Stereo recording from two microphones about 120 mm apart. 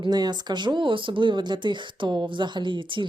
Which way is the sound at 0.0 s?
35° right (ahead or behind).